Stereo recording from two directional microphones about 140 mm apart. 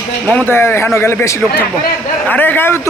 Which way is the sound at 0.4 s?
15° left (ahead or behind).